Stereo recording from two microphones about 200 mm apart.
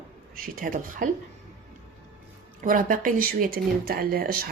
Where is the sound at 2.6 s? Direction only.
40° right (ahead or behind).